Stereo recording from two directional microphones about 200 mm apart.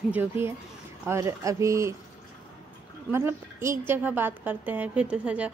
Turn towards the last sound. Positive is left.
turn(degrees=-5)  # may be behind; listen again after turning